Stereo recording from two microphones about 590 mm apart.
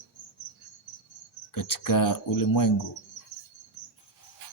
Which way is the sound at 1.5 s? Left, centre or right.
Left.